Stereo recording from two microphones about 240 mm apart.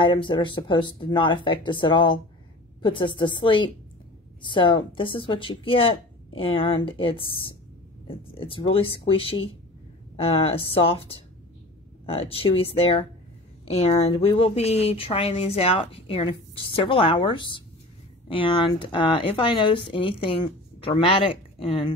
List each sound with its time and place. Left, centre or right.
0.0 s speech: centre
10.4 s speech: left